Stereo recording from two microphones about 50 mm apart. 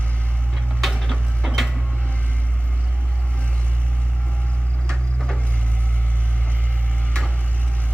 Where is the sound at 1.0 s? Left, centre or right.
Centre.